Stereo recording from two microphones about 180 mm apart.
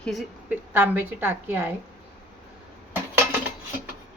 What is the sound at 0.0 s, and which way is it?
Speech, centre (ahead or behind).